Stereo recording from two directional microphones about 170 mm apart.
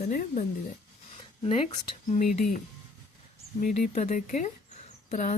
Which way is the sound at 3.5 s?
45° left (ahead or behind).